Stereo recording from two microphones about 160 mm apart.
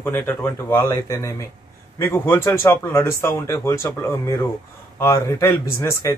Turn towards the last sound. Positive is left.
turn(degrees=15)  # may be behind; listen again after turning